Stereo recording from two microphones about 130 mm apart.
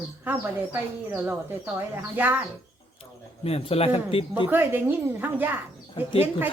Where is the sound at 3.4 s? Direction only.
50° left (ahead or behind).